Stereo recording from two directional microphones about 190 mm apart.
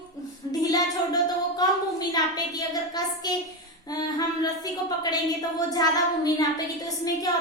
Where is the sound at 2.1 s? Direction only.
20° left (ahead or behind).